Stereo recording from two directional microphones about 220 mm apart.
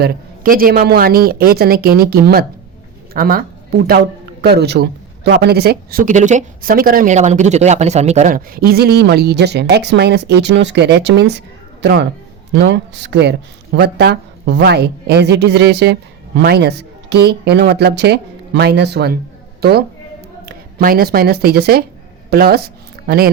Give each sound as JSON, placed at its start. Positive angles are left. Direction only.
{"t": 0.0, "sound": "speech", "side_deg": -40}
{"t": 20.4, "sound": "a woman's voice", "side_deg": -45}